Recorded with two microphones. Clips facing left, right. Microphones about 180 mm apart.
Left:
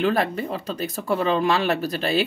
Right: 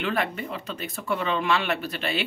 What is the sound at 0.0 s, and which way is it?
Speech, 40° left (ahead or behind).